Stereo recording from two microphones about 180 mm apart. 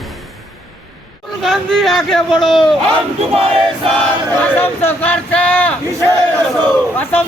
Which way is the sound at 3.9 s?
10° left (ahead or behind).